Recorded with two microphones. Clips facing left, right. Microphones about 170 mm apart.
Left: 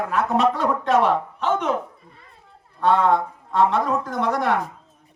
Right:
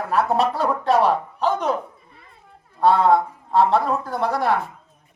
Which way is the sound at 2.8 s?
35° right (ahead or behind).